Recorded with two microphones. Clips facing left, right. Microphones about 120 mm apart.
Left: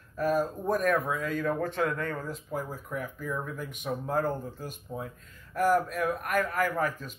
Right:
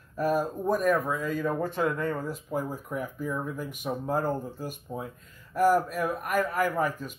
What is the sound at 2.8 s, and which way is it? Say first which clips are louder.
Speech: right 2 dB; 5° right (ahead or behind).